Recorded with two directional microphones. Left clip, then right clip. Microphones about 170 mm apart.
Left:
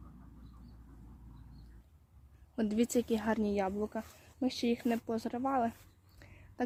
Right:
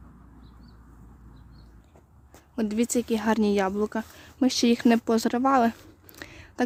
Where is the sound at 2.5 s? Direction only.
10° right (ahead or behind); by 5.7 s 45° right (ahead or behind).